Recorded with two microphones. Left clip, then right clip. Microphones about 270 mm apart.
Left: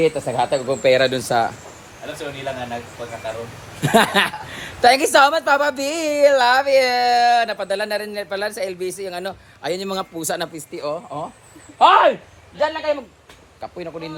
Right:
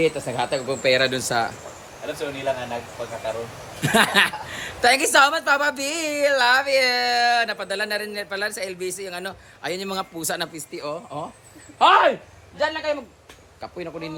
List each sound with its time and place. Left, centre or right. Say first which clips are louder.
0.0 s a woman's voice: left 4 dB; centre
2.3 s speech: right 1 dB; centre
3.8 s a woman's voice: left 2 dB; centre
13.6 s speech: left 2 dB; centre